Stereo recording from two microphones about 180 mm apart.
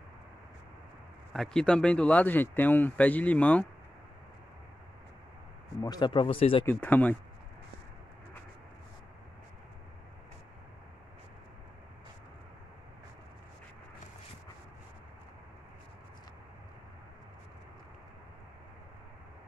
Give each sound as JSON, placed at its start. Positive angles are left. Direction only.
{"t": 1.3, "sound": "speech", "side_deg": 5}
{"t": 5.8, "sound": "speech", "side_deg": 25}
{"t": 6.6, "sound": "speech", "side_deg": 10}